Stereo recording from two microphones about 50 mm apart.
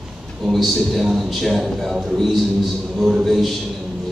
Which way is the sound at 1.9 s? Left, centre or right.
Centre.